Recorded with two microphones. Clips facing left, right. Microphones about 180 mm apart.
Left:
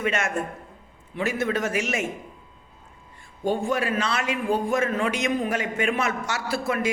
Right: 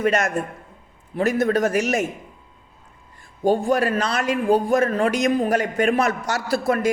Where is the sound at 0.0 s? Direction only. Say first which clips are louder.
Right 5 dB; 40° right (ahead or behind).